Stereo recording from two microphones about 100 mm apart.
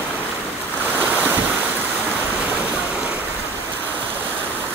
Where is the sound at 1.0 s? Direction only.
15° right (ahead or behind).